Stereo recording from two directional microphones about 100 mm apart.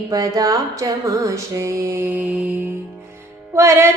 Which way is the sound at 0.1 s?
35° right (ahead or behind).